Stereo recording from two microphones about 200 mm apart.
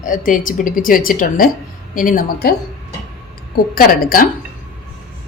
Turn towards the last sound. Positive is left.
turn(degrees=45)  # may be behind; listen again after turning